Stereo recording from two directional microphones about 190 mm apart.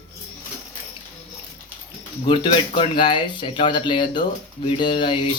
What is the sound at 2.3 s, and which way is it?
Speech, 25° left (ahead or behind).